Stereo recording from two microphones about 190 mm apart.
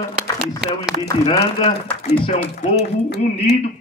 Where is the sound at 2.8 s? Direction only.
60° left (ahead or behind).